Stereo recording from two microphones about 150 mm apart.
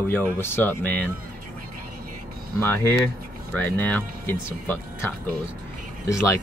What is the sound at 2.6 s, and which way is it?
Speech, 15° left (ahead or behind).